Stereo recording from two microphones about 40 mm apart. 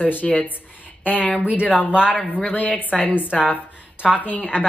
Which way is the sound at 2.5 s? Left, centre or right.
Left.